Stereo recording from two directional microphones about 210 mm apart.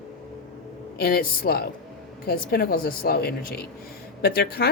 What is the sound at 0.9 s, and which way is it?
A man's voice, 50° left (ahead or behind).